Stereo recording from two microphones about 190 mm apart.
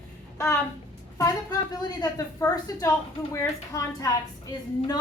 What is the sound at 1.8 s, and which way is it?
A woman's voice, 20° left (ahead or behind).